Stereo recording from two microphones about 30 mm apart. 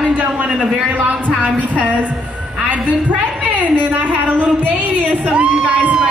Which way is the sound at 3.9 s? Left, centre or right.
Right.